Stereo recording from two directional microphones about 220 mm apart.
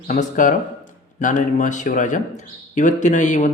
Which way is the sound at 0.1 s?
35° left (ahead or behind).